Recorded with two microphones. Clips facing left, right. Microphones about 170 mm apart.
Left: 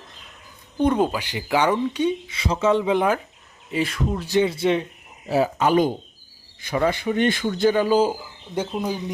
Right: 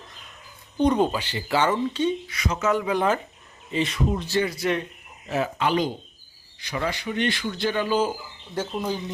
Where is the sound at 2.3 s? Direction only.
30° left (ahead or behind).